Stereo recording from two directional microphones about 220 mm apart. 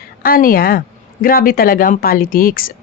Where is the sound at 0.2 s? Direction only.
40° left (ahead or behind).